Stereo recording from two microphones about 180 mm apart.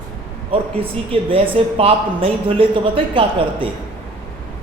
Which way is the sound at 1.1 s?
30° right (ahead or behind).